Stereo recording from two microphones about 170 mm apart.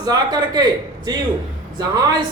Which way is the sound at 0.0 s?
25° right (ahead or behind).